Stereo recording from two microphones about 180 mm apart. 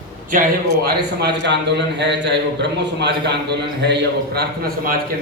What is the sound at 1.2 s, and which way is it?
A man's voice, 75° right (ahead or behind).